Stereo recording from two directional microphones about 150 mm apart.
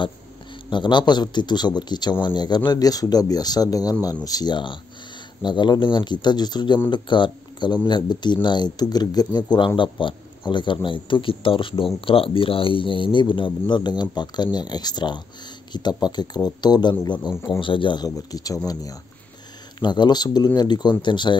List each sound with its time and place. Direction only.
0.7 s speech: 30° left (ahead or behind)